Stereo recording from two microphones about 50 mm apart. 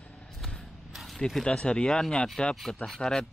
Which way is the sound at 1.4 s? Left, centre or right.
Centre.